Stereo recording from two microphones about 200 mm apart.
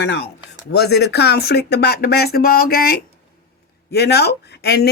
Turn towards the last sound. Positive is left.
turn(degrees=55)  # may be behind; listen again after turning